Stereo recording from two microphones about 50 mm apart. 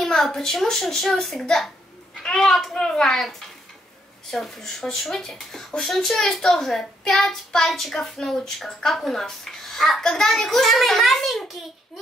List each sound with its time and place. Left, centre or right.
0.0 s a child's voice: centre